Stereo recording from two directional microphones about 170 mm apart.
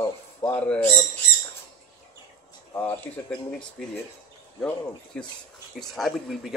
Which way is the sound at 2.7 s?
15° left (ahead or behind).